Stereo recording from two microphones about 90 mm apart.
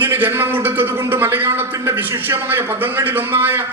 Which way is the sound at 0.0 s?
25° right (ahead or behind).